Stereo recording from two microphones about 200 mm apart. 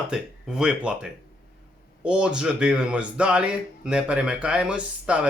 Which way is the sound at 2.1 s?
5° right (ahead or behind).